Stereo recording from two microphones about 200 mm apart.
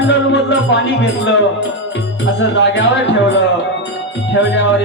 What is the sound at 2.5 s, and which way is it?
Music, 65° left (ahead or behind).